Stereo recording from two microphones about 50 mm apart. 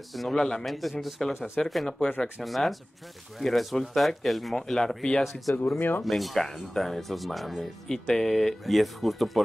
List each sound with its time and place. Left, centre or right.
0.1 s speech: centre
0.4 s speech: centre
0.7 s speech: centre
4.6 s speech: centre
5.2 s speech: centre
5.8 s speech: left
6.0 s speech: centre